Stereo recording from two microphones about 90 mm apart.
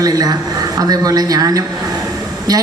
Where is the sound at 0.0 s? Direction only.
45° right (ahead or behind).